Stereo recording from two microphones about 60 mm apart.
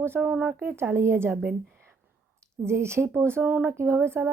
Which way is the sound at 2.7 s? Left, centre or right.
Right.